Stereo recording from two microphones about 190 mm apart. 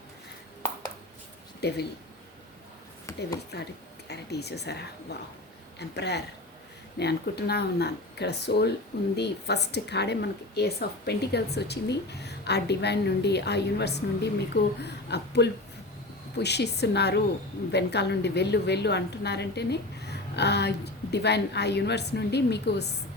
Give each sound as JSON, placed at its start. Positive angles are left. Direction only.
{"t": 1.6, "sound": "a woman's voice", "side_deg": 60}
{"t": 3.1, "sound": "a sound", "side_deg": 15}
{"t": 3.5, "sound": "a woman's voice", "side_deg": 60}
{"t": 6.0, "sound": "a woman's voice", "side_deg": 60}